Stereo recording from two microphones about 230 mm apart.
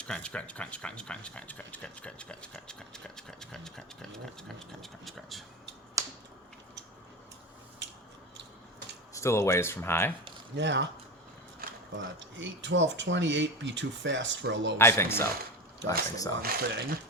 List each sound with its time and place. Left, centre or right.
0.0 s speech: centre
9.1 s speech: centre
10.5 s speech: right
11.6 s a sound: right
11.9 s speech: right
14.8 s speech: centre
15.8 s speech: right